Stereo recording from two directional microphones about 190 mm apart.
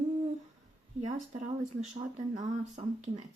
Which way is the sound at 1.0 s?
35° right (ahead or behind).